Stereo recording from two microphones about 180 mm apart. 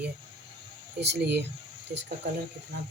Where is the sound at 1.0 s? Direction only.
70° right (ahead or behind).